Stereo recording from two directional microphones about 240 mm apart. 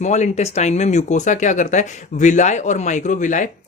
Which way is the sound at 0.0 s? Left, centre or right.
Left.